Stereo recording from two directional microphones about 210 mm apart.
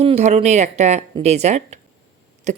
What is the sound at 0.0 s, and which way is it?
A woman's voice, 30° right (ahead or behind).